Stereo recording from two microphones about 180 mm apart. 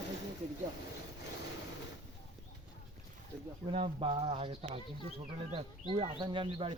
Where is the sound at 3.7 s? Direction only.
30° right (ahead or behind).